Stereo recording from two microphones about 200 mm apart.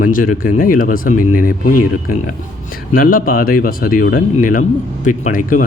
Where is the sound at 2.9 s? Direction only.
45° left (ahead or behind).